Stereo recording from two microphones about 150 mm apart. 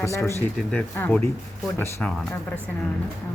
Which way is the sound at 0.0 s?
20° left (ahead or behind).